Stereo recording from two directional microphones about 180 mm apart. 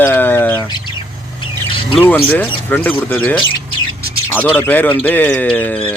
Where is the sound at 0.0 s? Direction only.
10° left (ahead or behind).